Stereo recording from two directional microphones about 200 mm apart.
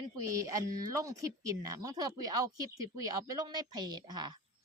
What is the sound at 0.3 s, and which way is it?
Speech, 15° right (ahead or behind).